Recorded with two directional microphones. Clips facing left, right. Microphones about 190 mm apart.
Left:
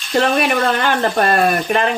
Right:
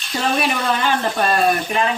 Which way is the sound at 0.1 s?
60° left (ahead or behind).